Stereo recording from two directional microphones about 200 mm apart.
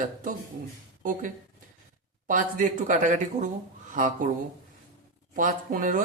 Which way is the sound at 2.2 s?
40° right (ahead or behind).